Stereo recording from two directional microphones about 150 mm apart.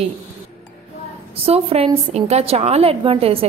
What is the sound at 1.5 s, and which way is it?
A woman's voice, 40° right (ahead or behind).